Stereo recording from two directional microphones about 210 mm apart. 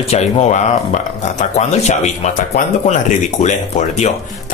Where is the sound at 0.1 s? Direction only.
30° left (ahead or behind).